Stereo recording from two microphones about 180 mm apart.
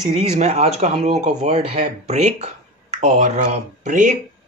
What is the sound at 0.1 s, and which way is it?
Speech, 40° right (ahead or behind).